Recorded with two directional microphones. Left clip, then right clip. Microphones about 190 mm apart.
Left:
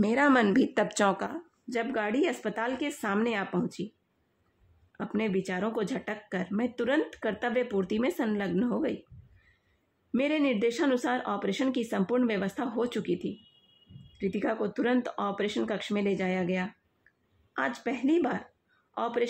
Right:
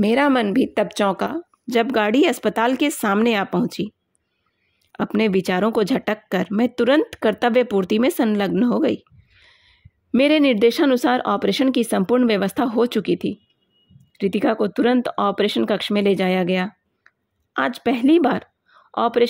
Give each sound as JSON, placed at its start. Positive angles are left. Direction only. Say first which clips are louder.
{"t": 0.0, "sound": "a woman's voice", "louder": "right 6 dB", "side_deg": -30}
{"t": 4.9, "sound": "speech", "louder": "right 11 dB", "side_deg": -50}
{"t": 10.1, "sound": "speech", "louder": "right 12 dB", "side_deg": -45}